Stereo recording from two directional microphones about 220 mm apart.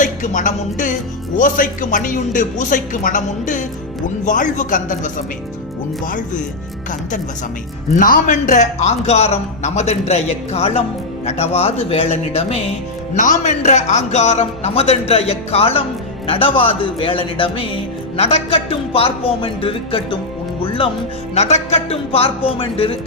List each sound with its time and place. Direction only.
0.0 s music: 35° left (ahead or behind)
1.4 s a man's voice: 40° left (ahead or behind)
7.9 s a man's voice: 35° left (ahead or behind)
20.6 s music: 25° left (ahead or behind)
21.3 s speech: 30° left (ahead or behind)